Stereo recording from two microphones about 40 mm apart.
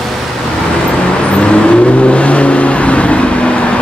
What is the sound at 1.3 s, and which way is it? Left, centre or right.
Vehicle, left.